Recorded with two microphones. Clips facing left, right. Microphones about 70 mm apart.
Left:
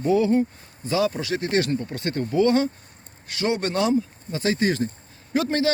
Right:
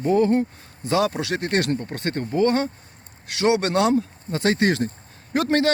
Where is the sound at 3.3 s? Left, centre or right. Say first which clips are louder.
Right 4 dB; right.